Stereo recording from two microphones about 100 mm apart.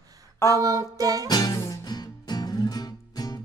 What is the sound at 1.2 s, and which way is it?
Music, 40° left (ahead or behind).